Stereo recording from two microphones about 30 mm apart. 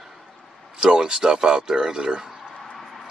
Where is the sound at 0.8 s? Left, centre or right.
Right.